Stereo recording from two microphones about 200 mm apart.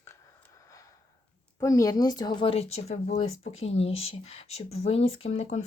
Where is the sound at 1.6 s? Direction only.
15° left (ahead or behind); by 5.6 s 35° left (ahead or behind).